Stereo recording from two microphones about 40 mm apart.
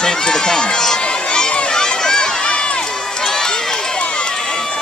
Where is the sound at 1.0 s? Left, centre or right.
Left.